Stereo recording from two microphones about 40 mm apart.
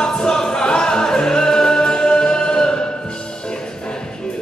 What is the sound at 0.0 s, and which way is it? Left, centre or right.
Music, centre.